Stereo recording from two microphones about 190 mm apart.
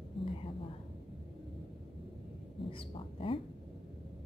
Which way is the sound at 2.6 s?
30° left (ahead or behind).